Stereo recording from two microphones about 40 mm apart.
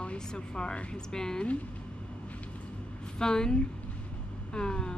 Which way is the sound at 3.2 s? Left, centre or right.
Centre.